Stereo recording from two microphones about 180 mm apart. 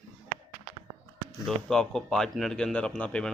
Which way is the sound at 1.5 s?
Centre (ahead or behind).